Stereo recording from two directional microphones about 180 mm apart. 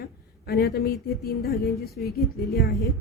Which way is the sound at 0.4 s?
60° left (ahead or behind).